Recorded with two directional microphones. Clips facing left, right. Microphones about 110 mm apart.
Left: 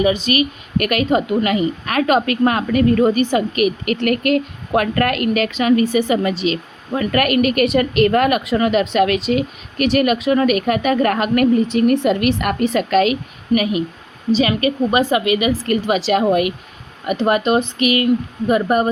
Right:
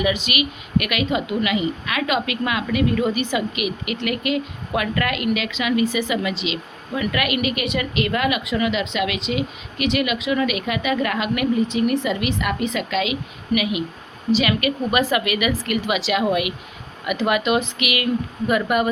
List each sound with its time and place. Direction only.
0.0 s a woman's voice: 35° left (ahead or behind)